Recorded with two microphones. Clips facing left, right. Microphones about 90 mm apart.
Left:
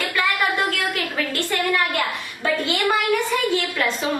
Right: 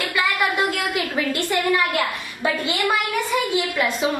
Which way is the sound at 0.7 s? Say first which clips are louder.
Right 1 dB; 15° right (ahead or behind).